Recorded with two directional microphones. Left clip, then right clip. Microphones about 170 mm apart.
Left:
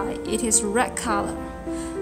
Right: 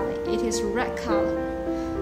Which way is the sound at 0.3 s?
40° left (ahead or behind).